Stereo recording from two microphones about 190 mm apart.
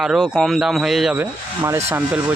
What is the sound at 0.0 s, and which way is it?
Speech, centre (ahead or behind).